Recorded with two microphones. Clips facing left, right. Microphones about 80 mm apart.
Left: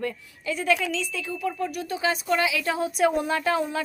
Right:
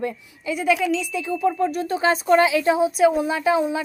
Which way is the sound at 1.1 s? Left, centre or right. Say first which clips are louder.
Right 7 dB; centre.